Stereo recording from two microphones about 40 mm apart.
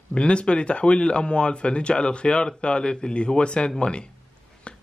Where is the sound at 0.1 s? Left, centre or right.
Left.